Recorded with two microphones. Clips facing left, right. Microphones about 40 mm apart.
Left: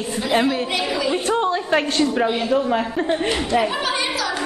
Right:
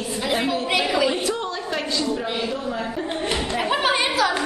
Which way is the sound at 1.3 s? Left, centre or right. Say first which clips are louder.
Left 7 dB; left.